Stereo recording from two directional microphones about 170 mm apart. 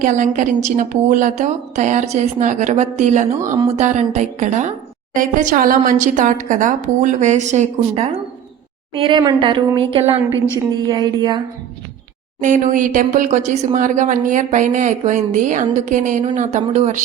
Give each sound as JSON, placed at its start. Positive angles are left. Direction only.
{"t": 0.0, "sound": "a woman's voice", "side_deg": -45}
{"t": 12.4, "sound": "a woman's voice", "side_deg": -45}